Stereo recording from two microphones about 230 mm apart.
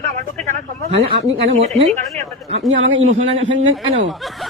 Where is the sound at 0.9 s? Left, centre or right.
Right.